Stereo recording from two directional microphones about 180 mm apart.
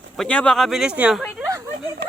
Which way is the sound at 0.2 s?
5° left (ahead or behind).